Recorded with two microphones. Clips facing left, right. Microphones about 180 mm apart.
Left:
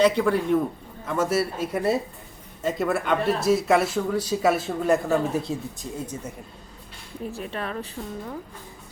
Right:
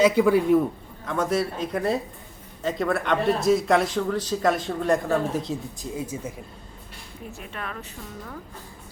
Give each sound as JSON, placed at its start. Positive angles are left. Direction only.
{"t": 0.0, "sound": "speech", "side_deg": -10}
{"t": 1.0, "sound": "speech", "side_deg": 5}
{"t": 7.3, "sound": "a woman's voice", "side_deg": 30}